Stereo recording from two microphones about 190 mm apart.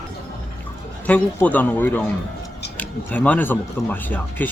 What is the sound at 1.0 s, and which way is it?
Speech, 10° left (ahead or behind).